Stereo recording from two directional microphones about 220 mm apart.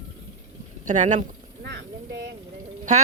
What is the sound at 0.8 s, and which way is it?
Speech, 35° right (ahead or behind).